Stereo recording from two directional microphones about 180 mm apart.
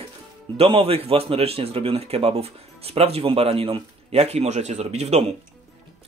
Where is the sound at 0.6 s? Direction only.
30° right (ahead or behind).